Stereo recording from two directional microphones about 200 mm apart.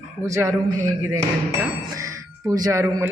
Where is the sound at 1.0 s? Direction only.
15° right (ahead or behind).